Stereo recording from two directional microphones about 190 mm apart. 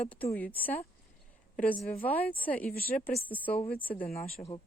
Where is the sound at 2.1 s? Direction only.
10° left (ahead or behind).